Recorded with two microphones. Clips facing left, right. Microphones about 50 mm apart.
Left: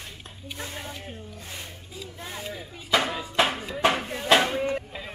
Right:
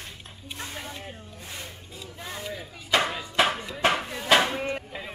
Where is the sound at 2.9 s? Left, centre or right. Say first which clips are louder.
Even; centre.